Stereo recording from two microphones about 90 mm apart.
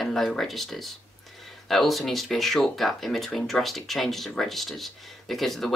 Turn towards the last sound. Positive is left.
turn(degrees=0)  # may be behind; listen again after turning